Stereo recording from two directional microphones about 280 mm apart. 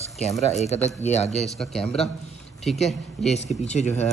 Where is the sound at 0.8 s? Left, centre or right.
Left.